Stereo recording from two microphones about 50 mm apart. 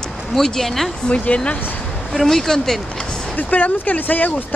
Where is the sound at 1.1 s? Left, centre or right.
Left.